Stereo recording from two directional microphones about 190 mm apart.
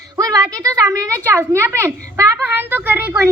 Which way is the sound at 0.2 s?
20° right (ahead or behind).